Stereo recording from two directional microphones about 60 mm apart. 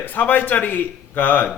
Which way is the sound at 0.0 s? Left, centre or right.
Left.